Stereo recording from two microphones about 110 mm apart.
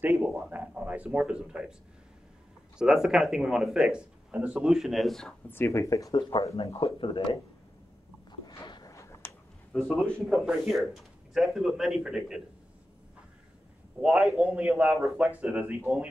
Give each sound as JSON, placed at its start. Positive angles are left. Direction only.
{"t": 0.0, "sound": "a sound", "side_deg": -15}
{"t": 0.5, "sound": "speech", "side_deg": -15}
{"t": 2.8, "sound": "speech", "side_deg": -5}
{"t": 5.5, "sound": "speech", "side_deg": 25}
{"t": 6.3, "sound": "speech", "side_deg": 55}
{"t": 8.6, "sound": "a sound", "side_deg": 40}
{"t": 8.9, "sound": "a sound", "side_deg": 25}
{"t": 9.7, "sound": "a man's voice", "side_deg": 0}
{"t": 14.0, "sound": "a man's voice", "side_deg": -5}